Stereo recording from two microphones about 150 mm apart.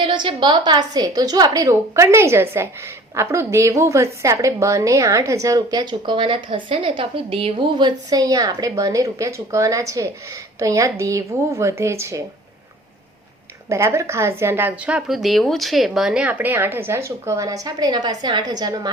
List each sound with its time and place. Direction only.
0.0 s a woman's voice: 35° right (ahead or behind)
13.7 s a woman's voice: 20° right (ahead or behind)